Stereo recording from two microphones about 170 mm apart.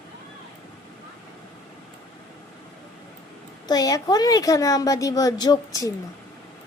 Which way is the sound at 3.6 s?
20° left (ahead or behind).